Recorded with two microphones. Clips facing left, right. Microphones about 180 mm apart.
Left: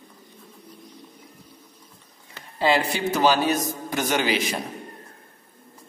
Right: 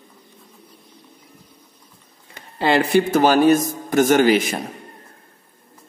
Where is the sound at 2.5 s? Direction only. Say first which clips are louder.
Right 6 dB; 60° right (ahead or behind).